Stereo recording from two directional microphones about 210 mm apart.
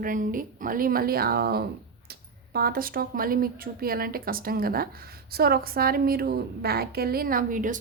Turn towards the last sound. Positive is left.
turn(degrees=-40)  # may be behind; listen again after turning